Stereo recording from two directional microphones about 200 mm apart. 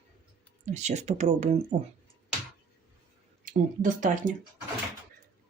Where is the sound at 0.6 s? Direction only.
35° right (ahead or behind).